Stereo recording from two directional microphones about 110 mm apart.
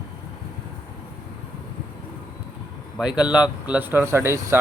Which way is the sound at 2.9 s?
10° right (ahead or behind).